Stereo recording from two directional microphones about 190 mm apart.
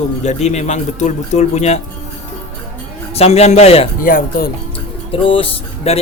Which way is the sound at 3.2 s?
35° left (ahead or behind).